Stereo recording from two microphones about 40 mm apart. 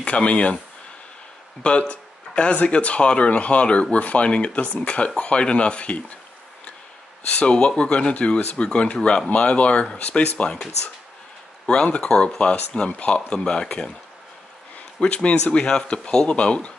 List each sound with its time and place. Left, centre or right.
0.0 s speech: left
1.6 s speech: left
7.2 s speech: left
11.6 s speech: left
15.0 s speech: left
15.6 s speech: centre